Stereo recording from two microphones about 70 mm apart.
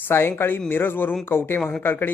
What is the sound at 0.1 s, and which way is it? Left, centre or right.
Speech, left.